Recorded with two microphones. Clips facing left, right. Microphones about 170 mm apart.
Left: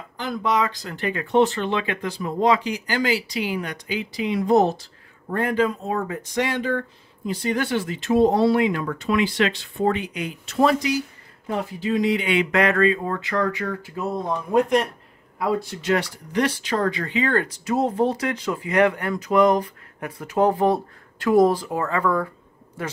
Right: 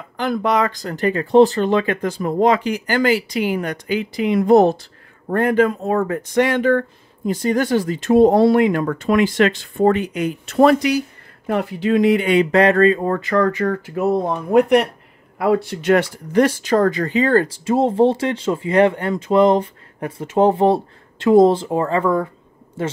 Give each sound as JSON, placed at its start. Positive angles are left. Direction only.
{"t": 0.2, "sound": "speech", "side_deg": -60}
{"t": 14.5, "sound": "speech", "side_deg": -65}